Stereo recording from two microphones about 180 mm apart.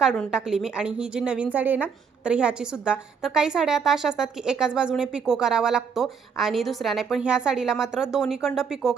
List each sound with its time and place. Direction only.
0.0 s a woman's voice: 5° right (ahead or behind)